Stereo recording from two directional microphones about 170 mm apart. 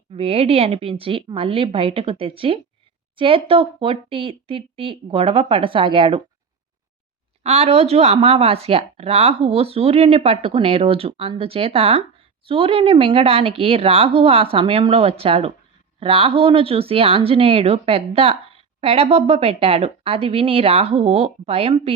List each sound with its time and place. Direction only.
0.1 s speech: 35° right (ahead or behind)
7.4 s speech: 40° right (ahead or behind)